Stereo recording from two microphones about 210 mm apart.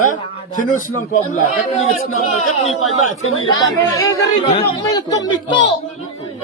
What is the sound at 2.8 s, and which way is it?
Speech, 80° left.